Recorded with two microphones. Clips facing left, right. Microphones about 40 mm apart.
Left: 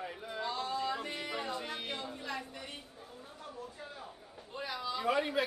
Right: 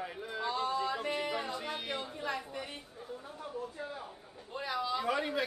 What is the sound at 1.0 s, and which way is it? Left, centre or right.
Yodeling, centre.